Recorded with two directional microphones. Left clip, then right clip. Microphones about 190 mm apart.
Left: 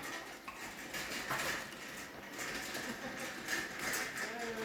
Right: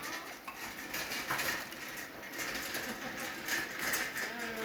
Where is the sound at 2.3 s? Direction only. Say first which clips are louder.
Right 3 dB; 10° right (ahead or behind).